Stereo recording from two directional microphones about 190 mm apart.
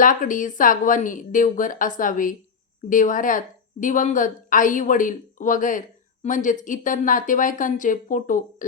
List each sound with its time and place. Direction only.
0.0 s a woman's voice: 45° left (ahead or behind)